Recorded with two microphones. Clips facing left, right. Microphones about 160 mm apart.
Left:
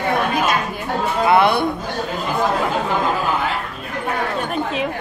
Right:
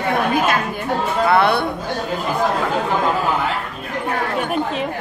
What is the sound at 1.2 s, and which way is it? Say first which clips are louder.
Speech: left 1 dB; 15° left (ahead or behind).